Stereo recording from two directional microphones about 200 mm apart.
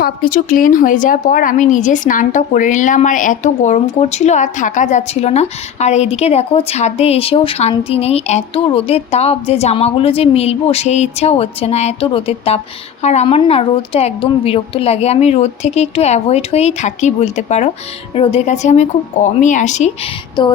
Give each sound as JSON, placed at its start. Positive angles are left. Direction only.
{"t": 0.0, "sound": "a woman's voice", "side_deg": 45}
{"t": 20.4, "sound": "music", "side_deg": 20}